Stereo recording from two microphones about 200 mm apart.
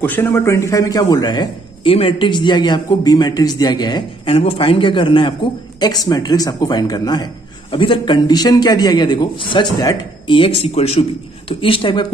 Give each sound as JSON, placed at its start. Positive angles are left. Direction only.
{"t": 0.0, "sound": "a man's voice", "side_deg": 10}